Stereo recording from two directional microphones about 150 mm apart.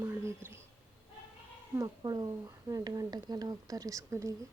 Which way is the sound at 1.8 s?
25° right (ahead or behind).